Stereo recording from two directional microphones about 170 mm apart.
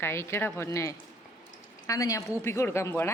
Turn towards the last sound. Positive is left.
turn(degrees=15)  # may be behind; listen again after turning